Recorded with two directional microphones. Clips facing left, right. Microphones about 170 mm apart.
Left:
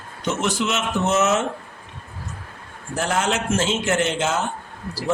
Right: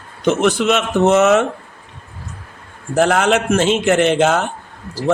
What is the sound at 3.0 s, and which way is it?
Speech, 65° right (ahead or behind).